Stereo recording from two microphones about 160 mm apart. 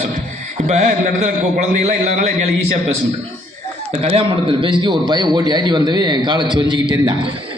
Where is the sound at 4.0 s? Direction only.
35° right (ahead or behind).